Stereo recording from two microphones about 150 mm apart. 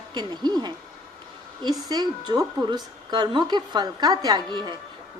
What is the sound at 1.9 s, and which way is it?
A woman's voice, 25° right (ahead or behind).